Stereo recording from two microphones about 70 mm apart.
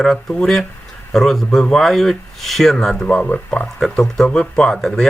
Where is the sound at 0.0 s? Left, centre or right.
Centre.